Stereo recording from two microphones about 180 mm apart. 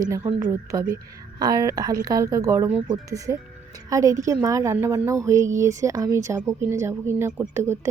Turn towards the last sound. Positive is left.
turn(degrees=-15)  # may be behind; listen again after turning